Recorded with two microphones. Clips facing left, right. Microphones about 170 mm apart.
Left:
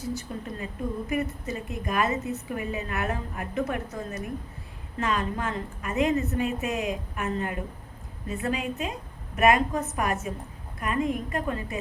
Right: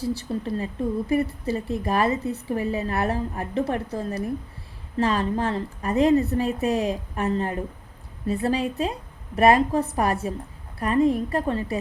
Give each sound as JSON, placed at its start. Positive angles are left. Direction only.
{"t": 0.0, "sound": "a woman's voice", "side_deg": -30}